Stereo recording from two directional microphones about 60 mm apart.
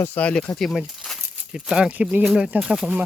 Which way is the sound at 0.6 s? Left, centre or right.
Centre.